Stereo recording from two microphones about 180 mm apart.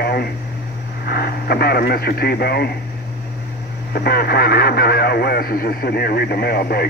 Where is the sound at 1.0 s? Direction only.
60° left (ahead or behind).